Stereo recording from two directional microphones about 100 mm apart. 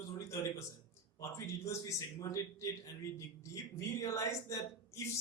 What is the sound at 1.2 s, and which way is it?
A man's voice, 30° left (ahead or behind).